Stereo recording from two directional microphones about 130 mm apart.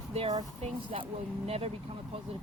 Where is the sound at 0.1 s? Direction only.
50° right (ahead or behind).